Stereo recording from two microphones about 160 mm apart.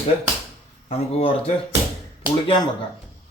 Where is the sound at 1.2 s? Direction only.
40° left (ahead or behind).